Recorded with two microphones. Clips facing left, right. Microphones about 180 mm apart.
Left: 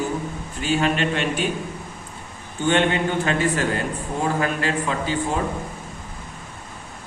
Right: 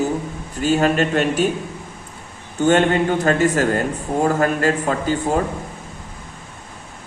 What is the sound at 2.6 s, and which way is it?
A man's voice, 45° right (ahead or behind).